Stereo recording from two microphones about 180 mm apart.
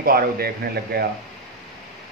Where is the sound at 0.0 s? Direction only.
55° right (ahead or behind).